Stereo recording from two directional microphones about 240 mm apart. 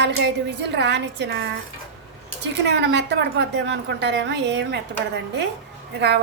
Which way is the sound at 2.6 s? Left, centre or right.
Right.